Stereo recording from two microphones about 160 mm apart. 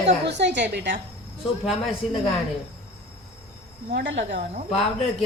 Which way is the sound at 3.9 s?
90° right.